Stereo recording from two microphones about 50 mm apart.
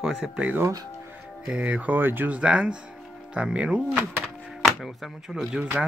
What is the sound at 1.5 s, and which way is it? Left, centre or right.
Speech, right.